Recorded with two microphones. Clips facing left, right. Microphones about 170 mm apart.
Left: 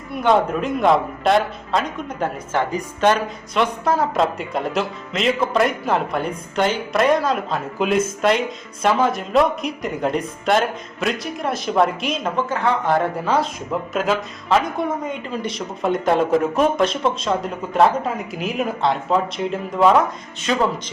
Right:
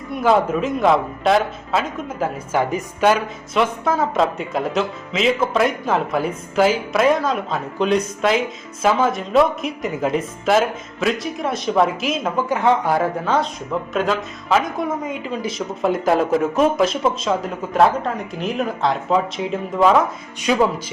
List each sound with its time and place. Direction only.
0.1 s speech: centre (ahead or behind)
12.5 s speech: 20° right (ahead or behind)
12.8 s speech: 5° right (ahead or behind)